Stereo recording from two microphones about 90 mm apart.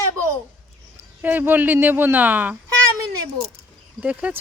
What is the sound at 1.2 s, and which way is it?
Speech, 20° right (ahead or behind).